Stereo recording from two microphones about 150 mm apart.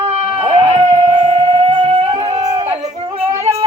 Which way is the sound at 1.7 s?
35° right (ahead or behind).